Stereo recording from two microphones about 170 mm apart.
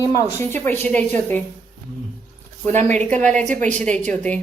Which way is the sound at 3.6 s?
5° left (ahead or behind).